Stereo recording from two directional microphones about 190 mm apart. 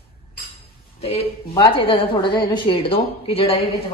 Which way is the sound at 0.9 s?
30° left (ahead or behind).